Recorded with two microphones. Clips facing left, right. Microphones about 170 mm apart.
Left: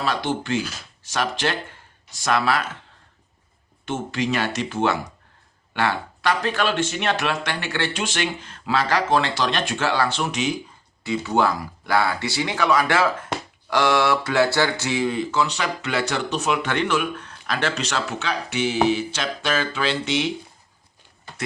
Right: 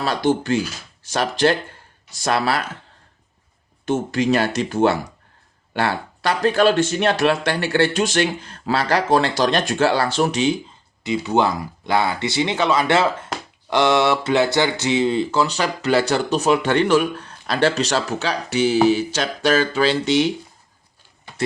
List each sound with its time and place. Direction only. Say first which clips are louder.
0.0 s speech: right 5 dB; 40° right (ahead or behind)
3.8 s speech: right 6 dB; 40° right (ahead or behind)
11.0 s speech: right 2 dB; 20° right (ahead or behind); by 20.3 s 40° right (ahead or behind)